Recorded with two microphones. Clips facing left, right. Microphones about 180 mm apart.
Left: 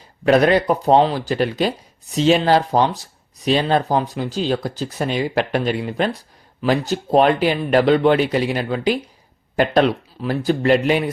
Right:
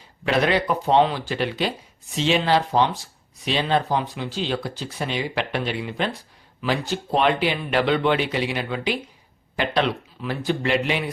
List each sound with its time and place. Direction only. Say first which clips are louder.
0.3 s speech: left 6 dB; 45° left (ahead or behind)